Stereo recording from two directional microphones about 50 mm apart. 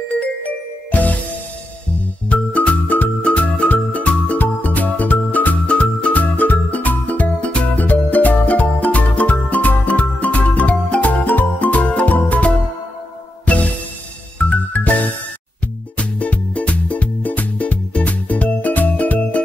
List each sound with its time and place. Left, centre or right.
0.9 s music: left
2.2 s music: left
5.7 s music: left
14.4 s music: left